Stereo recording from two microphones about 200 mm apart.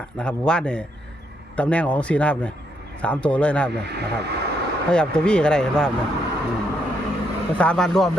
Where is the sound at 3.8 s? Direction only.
55° right (ahead or behind).